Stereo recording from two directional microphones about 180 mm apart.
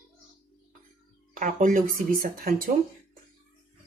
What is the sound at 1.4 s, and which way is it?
Speech, 45° right (ahead or behind).